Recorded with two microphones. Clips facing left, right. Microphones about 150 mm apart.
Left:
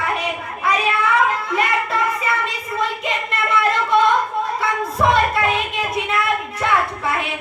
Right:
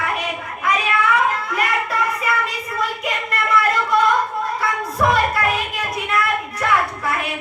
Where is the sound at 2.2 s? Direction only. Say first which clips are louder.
Even; centre (ahead or behind).